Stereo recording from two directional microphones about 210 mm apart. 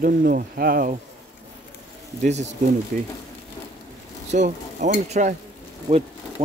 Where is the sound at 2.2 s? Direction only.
35° right (ahead or behind).